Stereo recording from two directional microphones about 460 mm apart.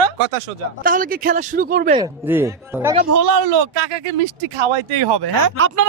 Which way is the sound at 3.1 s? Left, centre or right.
Right.